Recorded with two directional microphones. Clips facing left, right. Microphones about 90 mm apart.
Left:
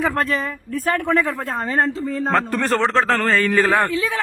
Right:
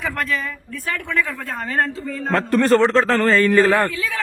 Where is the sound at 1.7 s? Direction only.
30° left (ahead or behind).